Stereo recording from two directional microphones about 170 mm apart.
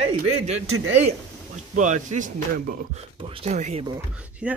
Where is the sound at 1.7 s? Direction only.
45° right (ahead or behind).